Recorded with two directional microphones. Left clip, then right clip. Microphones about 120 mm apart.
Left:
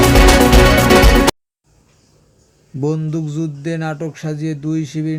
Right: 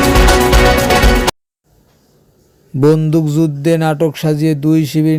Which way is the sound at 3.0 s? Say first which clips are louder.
Right 9 dB; 85° right.